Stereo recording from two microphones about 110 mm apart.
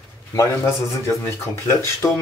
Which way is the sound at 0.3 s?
25° left (ahead or behind).